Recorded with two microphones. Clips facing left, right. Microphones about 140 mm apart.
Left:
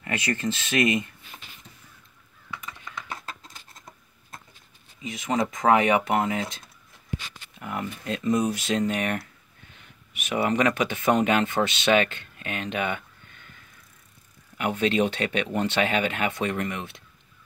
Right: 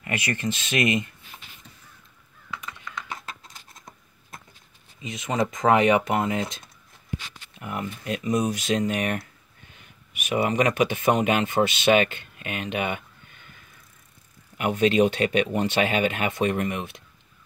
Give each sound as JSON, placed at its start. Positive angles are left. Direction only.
{"t": 0.1, "sound": "speech", "side_deg": -15}
{"t": 5.0, "sound": "speech", "side_deg": -20}
{"t": 7.6, "sound": "speech", "side_deg": -20}
{"t": 14.6, "sound": "speech", "side_deg": -15}